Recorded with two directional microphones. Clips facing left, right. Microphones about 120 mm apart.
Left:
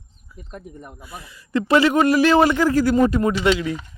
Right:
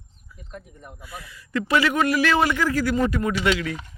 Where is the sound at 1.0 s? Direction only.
25° left (ahead or behind).